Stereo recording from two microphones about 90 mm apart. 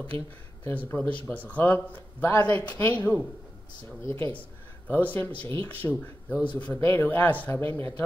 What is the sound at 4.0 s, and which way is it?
Speech, 30° left (ahead or behind).